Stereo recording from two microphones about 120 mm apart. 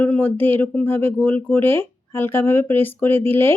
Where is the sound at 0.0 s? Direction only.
15° left (ahead or behind).